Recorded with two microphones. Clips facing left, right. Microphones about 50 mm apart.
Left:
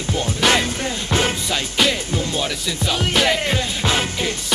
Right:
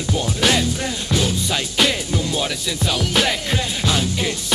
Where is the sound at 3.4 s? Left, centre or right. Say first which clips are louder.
Left 1 dB; left.